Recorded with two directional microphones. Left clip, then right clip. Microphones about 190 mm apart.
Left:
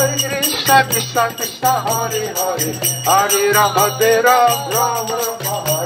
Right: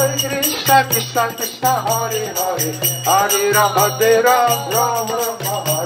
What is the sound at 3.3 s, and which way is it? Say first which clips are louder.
Music: left 1 dB; 5° left (ahead or behind).